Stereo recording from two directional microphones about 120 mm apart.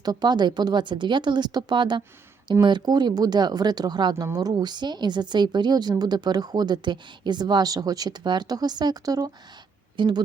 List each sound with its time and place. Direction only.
0.0 s a woman's voice: 35° right (ahead or behind)